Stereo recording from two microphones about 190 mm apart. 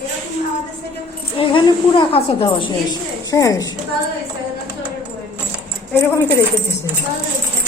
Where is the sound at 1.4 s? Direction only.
25° left (ahead or behind).